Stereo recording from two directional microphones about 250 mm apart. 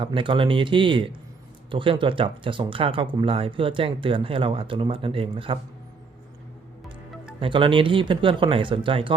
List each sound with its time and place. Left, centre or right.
0.0 s speech: centre
7.3 s speech: right